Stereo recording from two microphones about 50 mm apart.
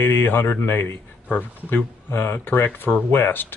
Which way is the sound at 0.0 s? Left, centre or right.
Left.